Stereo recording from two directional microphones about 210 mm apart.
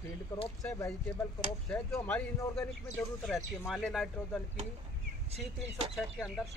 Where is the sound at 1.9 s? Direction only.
10° left (ahead or behind).